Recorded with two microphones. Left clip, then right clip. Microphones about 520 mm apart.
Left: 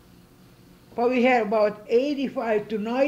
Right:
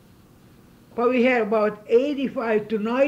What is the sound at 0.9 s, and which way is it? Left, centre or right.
A man's voice, centre.